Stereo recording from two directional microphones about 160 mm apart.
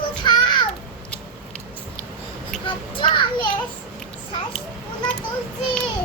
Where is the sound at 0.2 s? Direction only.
30° left (ahead or behind).